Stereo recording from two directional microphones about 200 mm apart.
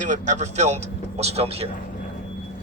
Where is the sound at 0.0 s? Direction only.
40° right (ahead or behind).